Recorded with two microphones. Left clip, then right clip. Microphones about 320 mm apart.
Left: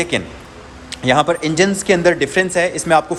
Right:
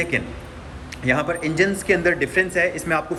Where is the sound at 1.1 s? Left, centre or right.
Centre.